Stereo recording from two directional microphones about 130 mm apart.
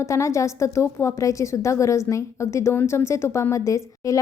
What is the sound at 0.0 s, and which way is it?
A woman's voice, 20° left (ahead or behind).